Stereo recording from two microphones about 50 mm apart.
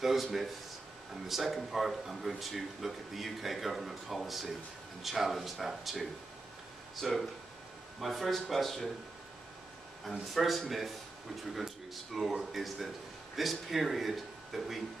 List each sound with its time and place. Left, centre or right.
0.0 s speech: centre
7.0 s speech: centre
10.2 s speech: centre
11.9 s speech: centre